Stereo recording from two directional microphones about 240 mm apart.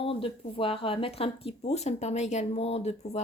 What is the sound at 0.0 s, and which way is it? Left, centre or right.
Speech, left.